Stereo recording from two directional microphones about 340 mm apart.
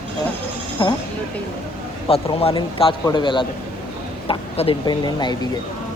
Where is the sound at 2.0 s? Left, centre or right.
Centre.